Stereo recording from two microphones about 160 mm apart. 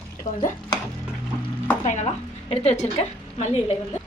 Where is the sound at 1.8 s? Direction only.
45° left (ahead or behind).